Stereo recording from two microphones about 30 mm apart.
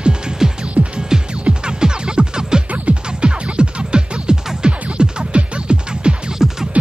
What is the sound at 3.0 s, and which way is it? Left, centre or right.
Music, right.